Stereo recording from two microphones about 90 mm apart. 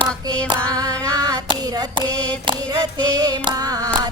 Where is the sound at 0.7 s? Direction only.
40° right (ahead or behind).